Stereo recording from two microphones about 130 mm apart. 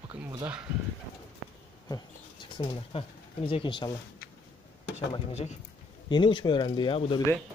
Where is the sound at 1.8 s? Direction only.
30° left (ahead or behind).